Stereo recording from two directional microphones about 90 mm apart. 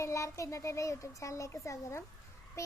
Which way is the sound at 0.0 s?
35° left (ahead or behind).